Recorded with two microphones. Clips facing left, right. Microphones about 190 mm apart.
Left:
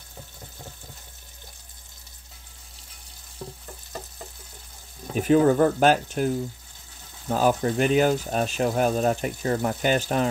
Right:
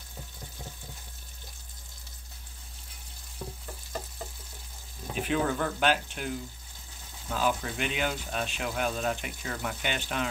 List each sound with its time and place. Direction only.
5.1 s speech: 40° left (ahead or behind)